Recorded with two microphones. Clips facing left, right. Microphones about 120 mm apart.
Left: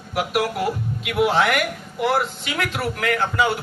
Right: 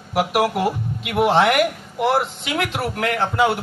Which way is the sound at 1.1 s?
50° right (ahead or behind).